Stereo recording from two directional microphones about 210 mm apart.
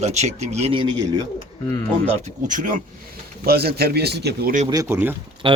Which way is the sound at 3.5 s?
50° right (ahead or behind).